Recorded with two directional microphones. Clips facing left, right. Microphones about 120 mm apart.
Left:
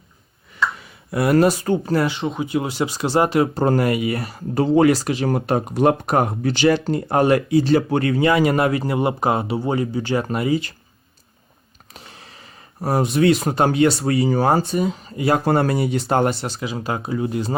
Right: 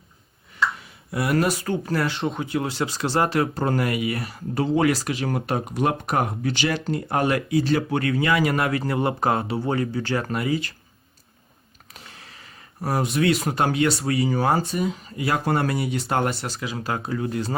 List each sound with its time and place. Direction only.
1.1 s speech: 45° left (ahead or behind)
1.4 s speech: 30° left (ahead or behind)
2.0 s speech: centre (ahead or behind)
2.4 s speech: 15° left (ahead or behind)
11.9 s speech: 25° left (ahead or behind)